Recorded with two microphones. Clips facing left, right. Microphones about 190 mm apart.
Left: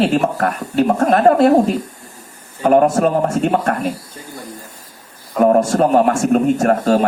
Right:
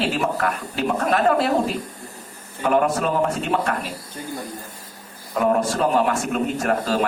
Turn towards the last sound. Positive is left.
turn(degrees=45)  # may be behind; listen again after turning